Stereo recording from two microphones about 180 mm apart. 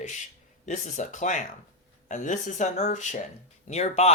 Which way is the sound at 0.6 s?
40° left (ahead or behind).